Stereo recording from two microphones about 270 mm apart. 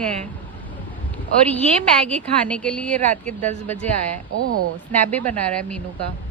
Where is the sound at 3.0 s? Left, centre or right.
Right.